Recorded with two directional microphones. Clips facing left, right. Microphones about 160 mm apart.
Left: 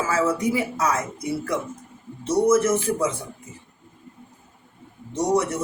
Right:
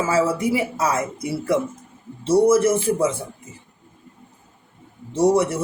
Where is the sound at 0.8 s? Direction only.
30° right (ahead or behind).